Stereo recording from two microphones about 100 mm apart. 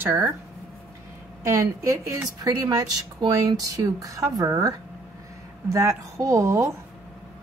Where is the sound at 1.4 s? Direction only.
30° right (ahead or behind).